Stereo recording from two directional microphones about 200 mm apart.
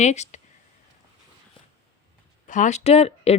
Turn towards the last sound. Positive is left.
turn(degrees=30)  # may be behind; listen again after turning